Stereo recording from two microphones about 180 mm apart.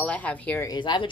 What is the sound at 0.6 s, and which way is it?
Speech, 25° left (ahead or behind).